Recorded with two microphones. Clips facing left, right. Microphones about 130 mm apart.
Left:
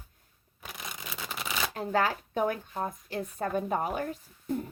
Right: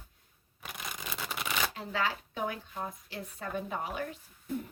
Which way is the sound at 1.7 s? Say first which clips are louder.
Left 6 dB; 45° left (ahead or behind).